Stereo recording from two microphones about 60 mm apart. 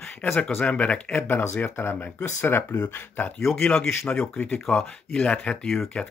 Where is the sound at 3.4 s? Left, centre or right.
Centre; by 5.5 s left.